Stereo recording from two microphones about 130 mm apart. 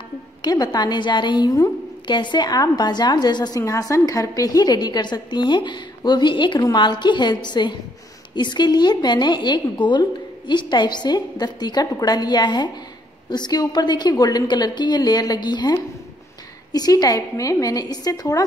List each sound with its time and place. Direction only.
0.4 s a woman's voice: 30° left (ahead or behind)
16.7 s a woman's voice: 30° left (ahead or behind)